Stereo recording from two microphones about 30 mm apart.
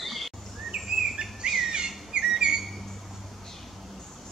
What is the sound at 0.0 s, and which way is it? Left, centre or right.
Bird vocalization, centre.